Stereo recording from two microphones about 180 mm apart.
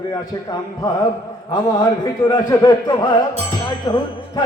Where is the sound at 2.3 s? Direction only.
25° left (ahead or behind).